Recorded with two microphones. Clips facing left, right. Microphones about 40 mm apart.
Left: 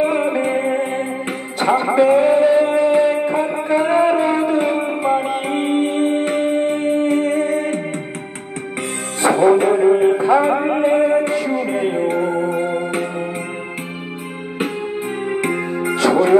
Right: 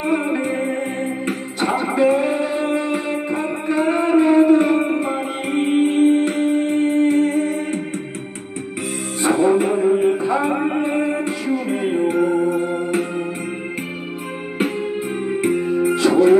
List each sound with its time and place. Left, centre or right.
0.0 s music: left
9.2 s music: left
15.4 s music: left